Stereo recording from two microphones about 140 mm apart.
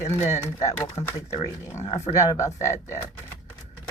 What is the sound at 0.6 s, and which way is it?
Speech, 20° left (ahead or behind).